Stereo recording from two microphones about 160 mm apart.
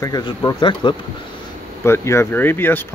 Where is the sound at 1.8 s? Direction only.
15° left (ahead or behind).